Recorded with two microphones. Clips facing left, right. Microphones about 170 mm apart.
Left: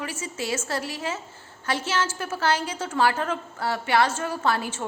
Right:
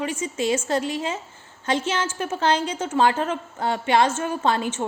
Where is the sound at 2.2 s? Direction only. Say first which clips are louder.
Right 3 dB; 25° right (ahead or behind).